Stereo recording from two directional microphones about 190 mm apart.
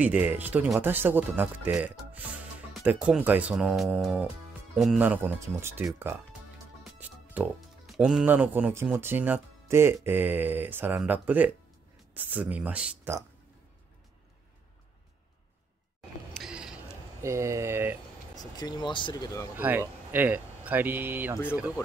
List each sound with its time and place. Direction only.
0.0 s speech: 10° right (ahead or behind)
16.3 s a sound: 5° right (ahead or behind)
17.2 s speech: 15° right (ahead or behind)
18.3 s speech: 20° left (ahead or behind)
19.5 s speech: 10° right (ahead or behind)